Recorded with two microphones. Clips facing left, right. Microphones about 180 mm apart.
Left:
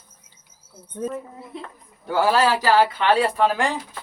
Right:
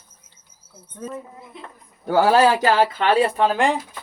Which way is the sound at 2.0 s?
50° right (ahead or behind).